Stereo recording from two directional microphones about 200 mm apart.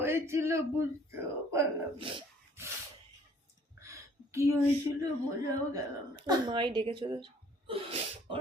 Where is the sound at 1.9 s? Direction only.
25° right (ahead or behind).